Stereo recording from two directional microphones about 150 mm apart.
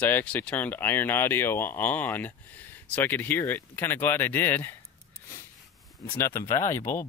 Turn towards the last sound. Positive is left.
turn(degrees=15)  # may be behind; listen again after turning